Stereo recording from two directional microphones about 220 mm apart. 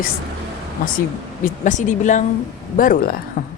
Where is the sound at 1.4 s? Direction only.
35° left (ahead or behind).